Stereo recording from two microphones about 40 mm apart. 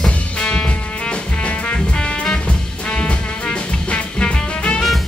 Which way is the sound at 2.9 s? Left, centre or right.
Left.